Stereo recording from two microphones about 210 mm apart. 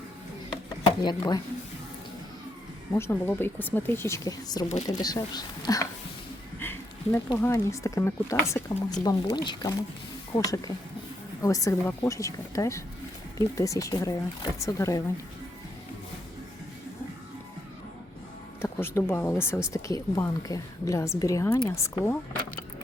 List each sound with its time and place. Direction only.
1.0 s speech: 20° left (ahead or behind)
2.9 s speech: 10° left (ahead or behind)
18.6 s speech: 10° left (ahead or behind)